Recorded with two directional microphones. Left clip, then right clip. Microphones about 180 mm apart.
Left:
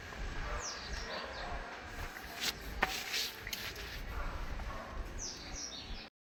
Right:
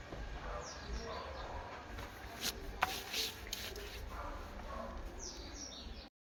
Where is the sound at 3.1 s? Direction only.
35° right (ahead or behind).